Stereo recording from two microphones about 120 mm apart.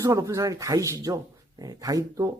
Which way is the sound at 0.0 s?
30° right (ahead or behind).